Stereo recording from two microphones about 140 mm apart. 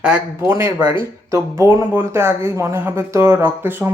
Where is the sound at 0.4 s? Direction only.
20° right (ahead or behind).